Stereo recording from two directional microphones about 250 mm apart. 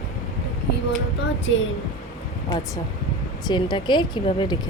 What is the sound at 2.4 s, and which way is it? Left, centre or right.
Speech, centre.